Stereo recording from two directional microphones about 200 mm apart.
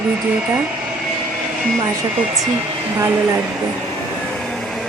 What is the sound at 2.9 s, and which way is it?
Speech, 15° right (ahead or behind).